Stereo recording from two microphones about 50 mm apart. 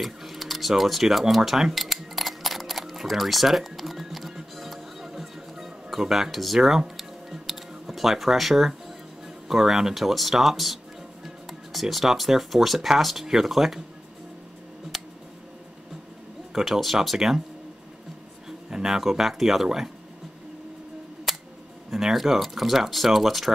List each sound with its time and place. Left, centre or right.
0.0 s a sound: centre
9.5 s speech: centre
14.9 s tick: centre
16.5 s speech: centre
18.7 s speech: centre
21.3 s scissors: centre
21.9 s speech: centre